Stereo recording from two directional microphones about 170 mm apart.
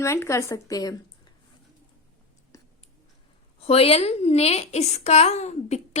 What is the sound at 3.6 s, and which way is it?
A woman's voice, 35° left (ahead or behind).